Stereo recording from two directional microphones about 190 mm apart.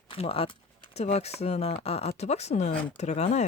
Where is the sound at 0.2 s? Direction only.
30° left (ahead or behind).